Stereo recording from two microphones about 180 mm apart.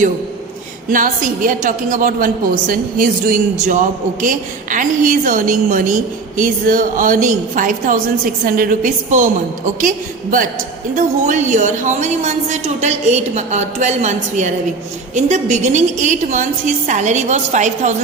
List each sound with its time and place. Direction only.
0.9 s a woman's voice: 50° right (ahead or behind)
10.9 s a woman's voice: 45° right (ahead or behind)